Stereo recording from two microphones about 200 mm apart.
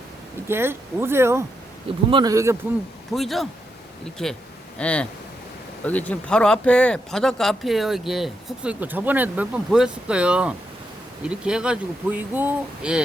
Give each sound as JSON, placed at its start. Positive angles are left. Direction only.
{"t": 0.4, "sound": "speech", "side_deg": -10}
{"t": 3.1, "sound": "speech", "side_deg": 0}